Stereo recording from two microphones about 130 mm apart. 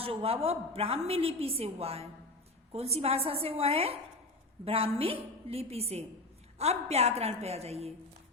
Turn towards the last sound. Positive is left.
turn(degrees=-55)  # may be behind; listen again after turning